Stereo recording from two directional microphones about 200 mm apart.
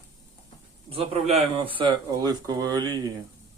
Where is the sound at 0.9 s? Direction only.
30° right (ahead or behind).